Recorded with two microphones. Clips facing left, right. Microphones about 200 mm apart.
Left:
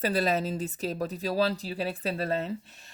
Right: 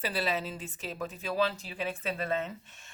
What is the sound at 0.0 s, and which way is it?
Speech, 45° left (ahead or behind).